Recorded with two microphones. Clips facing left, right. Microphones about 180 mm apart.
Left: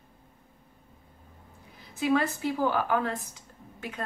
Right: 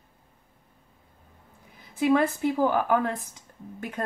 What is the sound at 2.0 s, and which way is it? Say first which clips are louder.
Speech: right 4 dB; 50° right (ahead or behind).